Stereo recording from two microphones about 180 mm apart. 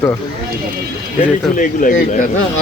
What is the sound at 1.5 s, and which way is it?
Speech, 45° left (ahead or behind).